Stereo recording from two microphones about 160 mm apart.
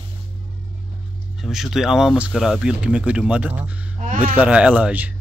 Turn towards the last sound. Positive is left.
turn(degrees=-10)  # may be behind; listen again after turning